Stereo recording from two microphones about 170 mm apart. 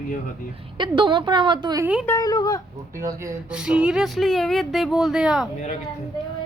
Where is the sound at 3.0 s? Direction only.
20° right (ahead or behind).